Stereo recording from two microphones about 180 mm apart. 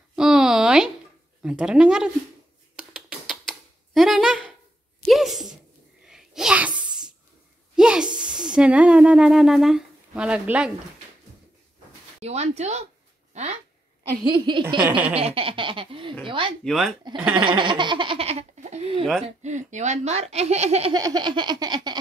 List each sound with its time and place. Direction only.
0.1 s a sound: 5° right (ahead or behind)
1.4 s speech: 5° right (ahead or behind)
2.7 s a sound: 5° right (ahead or behind)
8.1 s a sound: 25° right (ahead or behind)
8.4 s speech: 5° right (ahead or behind)
12.2 s speech: 35° right (ahead or behind)
14.2 s speech: 25° right (ahead or behind)
16.6 s speech: centre (ahead or behind)
17.3 s speech: 25° right (ahead or behind)
20.9 s speech: 20° right (ahead or behind)